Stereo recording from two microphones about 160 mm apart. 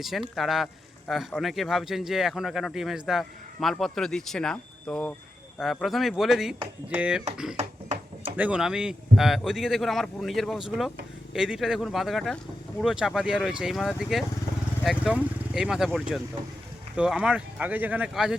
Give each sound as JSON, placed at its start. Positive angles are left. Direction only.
{"t": 0.0, "sound": "speech", "side_deg": 0}
{"t": 7.5, "sound": "a sound", "side_deg": -45}
{"t": 8.4, "sound": "speech", "side_deg": -5}